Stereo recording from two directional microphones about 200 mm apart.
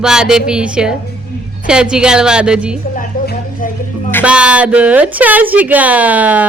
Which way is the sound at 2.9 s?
45° left (ahead or behind).